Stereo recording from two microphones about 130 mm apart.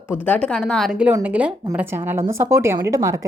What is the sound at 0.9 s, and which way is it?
A woman's voice, 10° right (ahead or behind).